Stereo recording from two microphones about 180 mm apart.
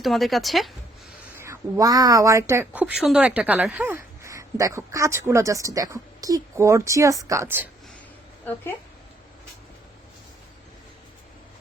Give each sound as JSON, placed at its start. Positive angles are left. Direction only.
{"t": 0.0, "sound": "speech", "side_deg": 0}
{"t": 1.4, "sound": "speech", "side_deg": -15}